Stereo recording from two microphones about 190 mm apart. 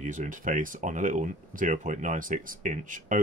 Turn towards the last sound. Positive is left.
turn(degrees=-45)  # may be behind; listen again after turning